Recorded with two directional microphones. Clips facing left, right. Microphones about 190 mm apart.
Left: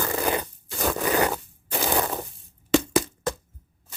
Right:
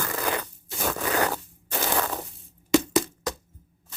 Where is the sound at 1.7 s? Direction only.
15° left (ahead or behind).